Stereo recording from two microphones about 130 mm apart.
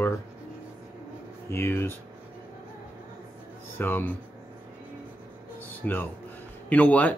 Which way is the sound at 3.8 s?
15° left (ahead or behind).